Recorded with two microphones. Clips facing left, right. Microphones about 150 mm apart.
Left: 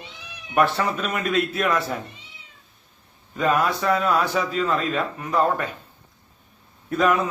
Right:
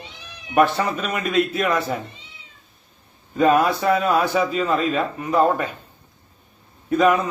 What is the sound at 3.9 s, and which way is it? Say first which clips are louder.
Speech: right 2 dB; 10° right (ahead or behind).